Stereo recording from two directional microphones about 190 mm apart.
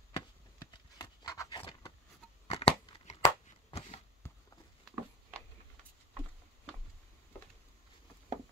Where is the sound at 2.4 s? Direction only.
30° left (ahead or behind).